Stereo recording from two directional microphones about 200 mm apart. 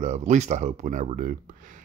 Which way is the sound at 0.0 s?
35° right (ahead or behind).